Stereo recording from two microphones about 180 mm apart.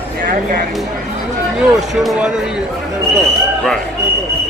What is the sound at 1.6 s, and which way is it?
Speech, centre (ahead or behind).